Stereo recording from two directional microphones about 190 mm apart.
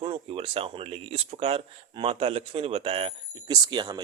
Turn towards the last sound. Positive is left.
turn(degrees=-25)  # may be behind; listen again after turning